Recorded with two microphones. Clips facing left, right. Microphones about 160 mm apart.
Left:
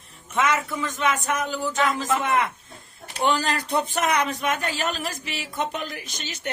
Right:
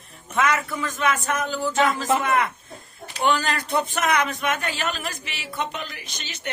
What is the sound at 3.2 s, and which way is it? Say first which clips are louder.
A woman's voice: right 1 dB; 30° left (ahead or behind).